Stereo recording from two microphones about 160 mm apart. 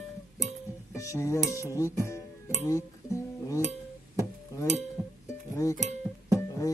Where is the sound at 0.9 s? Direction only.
20° left (ahead or behind).